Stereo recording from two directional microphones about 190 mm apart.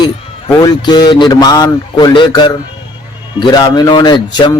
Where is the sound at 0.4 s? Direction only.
20° left (ahead or behind).